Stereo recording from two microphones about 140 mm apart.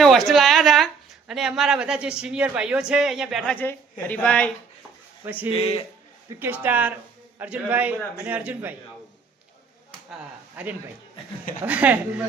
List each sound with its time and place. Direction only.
0.0 s a sound: centre (ahead or behind)
1.3 s a man's voice: 5° right (ahead or behind)
3.5 s speech: 15° left (ahead or behind)
5.2 s a man's voice: 10° right (ahead or behind)
5.5 s a man's voice: 45° left (ahead or behind)
6.4 s a man's voice: 15° right (ahead or behind)
10.6 s a man's voice: 10° right (ahead or behind)